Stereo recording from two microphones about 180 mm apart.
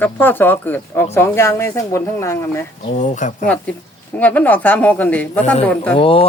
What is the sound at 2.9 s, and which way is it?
Speech, 45° left (ahead or behind).